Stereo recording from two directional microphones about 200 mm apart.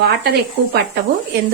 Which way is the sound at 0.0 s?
55° right (ahead or behind).